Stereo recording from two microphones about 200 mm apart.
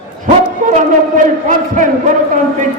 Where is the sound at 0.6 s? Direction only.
40° right (ahead or behind).